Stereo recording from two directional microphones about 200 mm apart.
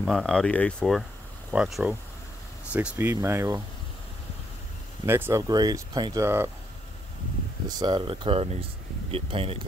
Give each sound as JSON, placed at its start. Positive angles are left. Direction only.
{"t": 0.0, "sound": "speech", "side_deg": 0}
{"t": 5.0, "sound": "speech", "side_deg": -10}
{"t": 7.6, "sound": "speech", "side_deg": -20}